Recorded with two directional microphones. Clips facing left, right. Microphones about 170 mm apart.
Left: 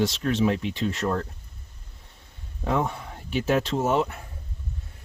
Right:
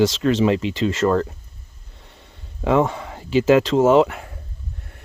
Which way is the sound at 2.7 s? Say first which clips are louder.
Right 8 dB; 90° right.